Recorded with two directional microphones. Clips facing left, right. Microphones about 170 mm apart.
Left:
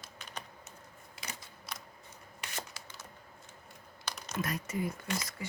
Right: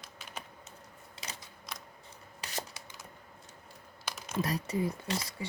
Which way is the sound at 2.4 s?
30° right (ahead or behind).